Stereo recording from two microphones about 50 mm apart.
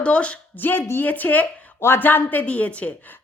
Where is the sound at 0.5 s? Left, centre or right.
Left.